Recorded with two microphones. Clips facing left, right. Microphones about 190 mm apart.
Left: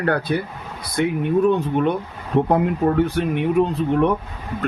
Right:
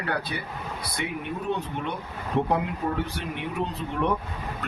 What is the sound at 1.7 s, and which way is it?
A man's voice, 50° left (ahead or behind).